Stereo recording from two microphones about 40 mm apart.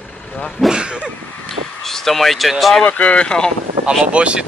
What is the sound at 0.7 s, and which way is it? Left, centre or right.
Speech, right.